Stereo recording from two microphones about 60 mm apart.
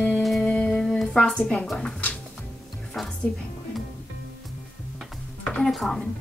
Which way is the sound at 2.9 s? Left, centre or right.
Centre.